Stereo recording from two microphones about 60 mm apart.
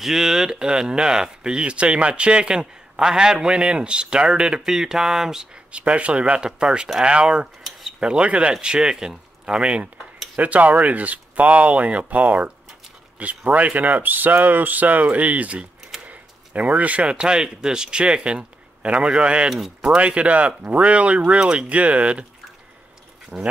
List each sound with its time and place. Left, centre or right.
0.0 s speech: centre
5.7 s speech: right
23.3 s speech: centre